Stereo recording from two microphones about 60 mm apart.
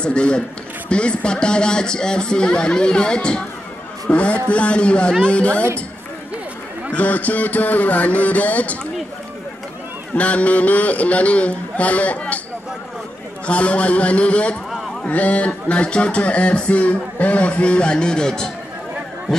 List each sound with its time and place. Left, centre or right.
0.0 s a man's voice: centre
6.9 s speech: left
10.1 s speech: left
13.5 s speech: left